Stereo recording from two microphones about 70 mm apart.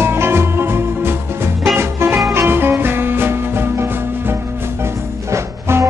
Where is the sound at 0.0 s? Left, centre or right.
Right.